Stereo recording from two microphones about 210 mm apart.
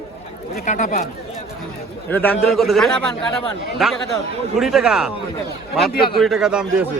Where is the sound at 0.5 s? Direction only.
35° left (ahead or behind).